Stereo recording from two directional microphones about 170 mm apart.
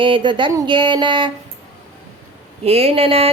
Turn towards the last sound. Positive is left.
turn(degrees=-35)  # may be behind; listen again after turning